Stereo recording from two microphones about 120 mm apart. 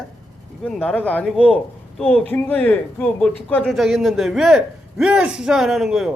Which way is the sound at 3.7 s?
Centre (ahead or behind).